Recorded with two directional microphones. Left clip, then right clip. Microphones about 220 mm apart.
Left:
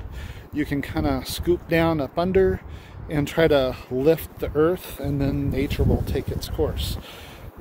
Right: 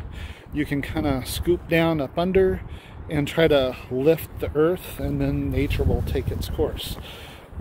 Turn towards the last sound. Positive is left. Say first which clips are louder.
# even
turn(degrees=5)  # may be behind; listen again after turning